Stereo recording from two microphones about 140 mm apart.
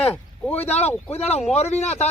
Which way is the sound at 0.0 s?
10° left (ahead or behind).